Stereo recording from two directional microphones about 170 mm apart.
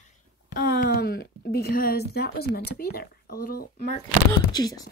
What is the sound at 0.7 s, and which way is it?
Speech, 70° left (ahead or behind).